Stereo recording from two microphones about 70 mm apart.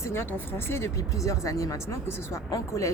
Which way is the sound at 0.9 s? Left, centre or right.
Left.